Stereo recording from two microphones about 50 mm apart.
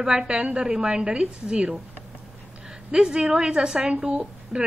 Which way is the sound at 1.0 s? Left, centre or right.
Right.